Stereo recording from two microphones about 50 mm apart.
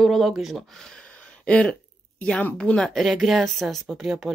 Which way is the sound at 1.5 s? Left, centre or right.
Left.